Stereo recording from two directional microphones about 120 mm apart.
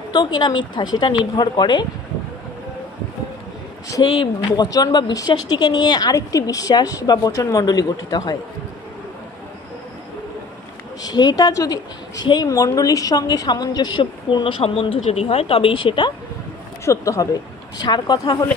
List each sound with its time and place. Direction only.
0.1 s a woman's voice: 35° left (ahead or behind)
4.0 s speech: 45° left (ahead or behind)
4.7 s a woman's voice: 35° left (ahead or behind)
11.0 s a woman's voice: 35° left (ahead or behind)
16.8 s a woman's voice: 25° left (ahead or behind)